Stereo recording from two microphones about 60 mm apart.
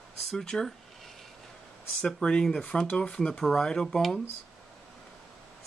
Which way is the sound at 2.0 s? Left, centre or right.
Centre.